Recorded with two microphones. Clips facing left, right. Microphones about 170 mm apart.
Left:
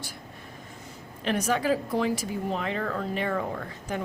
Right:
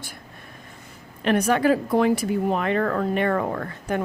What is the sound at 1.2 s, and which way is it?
Speech, 60° right (ahead or behind).